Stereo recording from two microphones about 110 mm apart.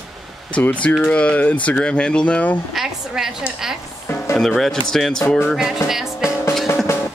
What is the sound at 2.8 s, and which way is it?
A woman's voice, 5° right (ahead or behind).